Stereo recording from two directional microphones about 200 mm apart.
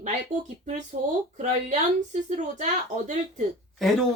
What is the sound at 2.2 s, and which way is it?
Speech, 35° right (ahead or behind).